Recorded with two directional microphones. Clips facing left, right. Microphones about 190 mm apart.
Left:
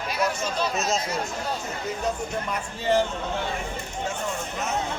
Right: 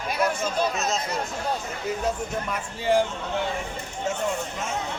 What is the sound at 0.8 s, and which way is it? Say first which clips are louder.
Speech: left 1 dB; centre (ahead or behind).